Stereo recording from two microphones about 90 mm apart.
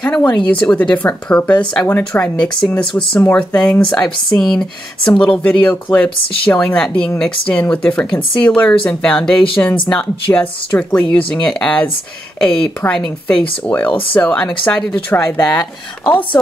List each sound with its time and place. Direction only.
0.0 s speech: 15° left (ahead or behind)
15.1 s speech: 25° left (ahead or behind)